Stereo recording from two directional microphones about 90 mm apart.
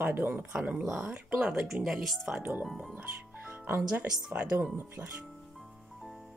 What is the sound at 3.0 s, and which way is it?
Music, 20° right (ahead or behind).